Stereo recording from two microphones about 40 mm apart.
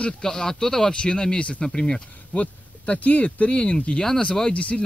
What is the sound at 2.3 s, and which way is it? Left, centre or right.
Speech, left.